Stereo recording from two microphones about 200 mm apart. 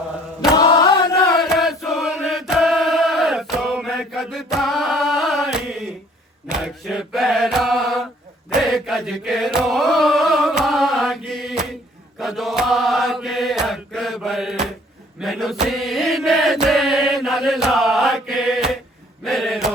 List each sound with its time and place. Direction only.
0.5 s chant: 20° left (ahead or behind)
1.5 s chant: centre (ahead or behind)
6.8 s mantra: centre (ahead or behind)
8.4 s chant: centre (ahead or behind)
12.2 s mantra: centre (ahead or behind)
19.2 s a sound: centre (ahead or behind)